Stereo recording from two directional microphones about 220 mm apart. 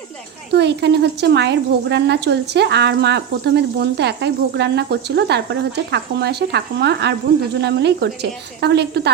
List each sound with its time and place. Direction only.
0.5 s speech: 50° right (ahead or behind)